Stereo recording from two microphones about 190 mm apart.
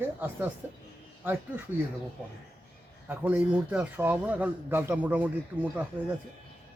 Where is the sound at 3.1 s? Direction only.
5° right (ahead or behind).